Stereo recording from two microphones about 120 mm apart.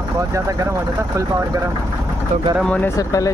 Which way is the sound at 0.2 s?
25° right (ahead or behind).